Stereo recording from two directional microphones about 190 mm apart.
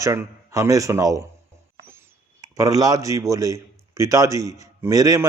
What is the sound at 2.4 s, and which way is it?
A man's voice, 20° right (ahead or behind).